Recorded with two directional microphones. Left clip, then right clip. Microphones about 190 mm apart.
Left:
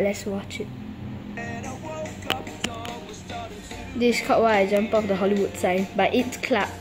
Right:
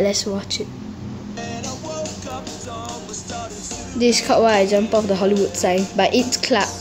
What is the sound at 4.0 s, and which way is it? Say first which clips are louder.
A woman's voice: right 4 dB; centre (ahead or behind).